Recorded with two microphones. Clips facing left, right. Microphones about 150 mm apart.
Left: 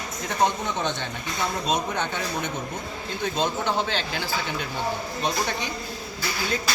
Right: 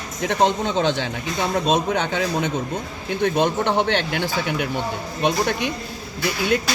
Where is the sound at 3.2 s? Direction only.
60° right (ahead or behind).